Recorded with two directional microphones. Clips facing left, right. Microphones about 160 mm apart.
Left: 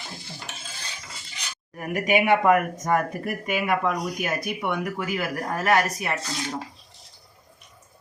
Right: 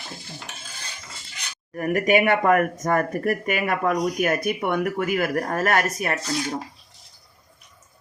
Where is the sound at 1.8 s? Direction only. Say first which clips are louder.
Right 4 dB; 50° right (ahead or behind).